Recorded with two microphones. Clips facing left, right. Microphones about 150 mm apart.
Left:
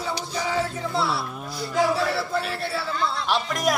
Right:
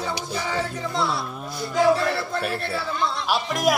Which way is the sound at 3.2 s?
15° right (ahead or behind).